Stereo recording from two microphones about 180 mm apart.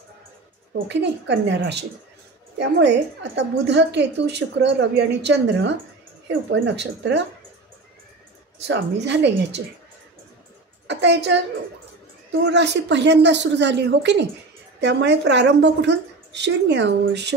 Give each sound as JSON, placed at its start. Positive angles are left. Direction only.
{"t": 0.8, "sound": "a woman's voice", "side_deg": -75}
{"t": 8.6, "sound": "a woman's voice", "side_deg": -75}
{"t": 10.9, "sound": "a woman's voice", "side_deg": -75}